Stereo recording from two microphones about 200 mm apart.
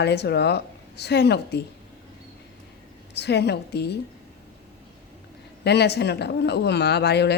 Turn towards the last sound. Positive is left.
turn(degrees=55)  # may be behind; listen again after turning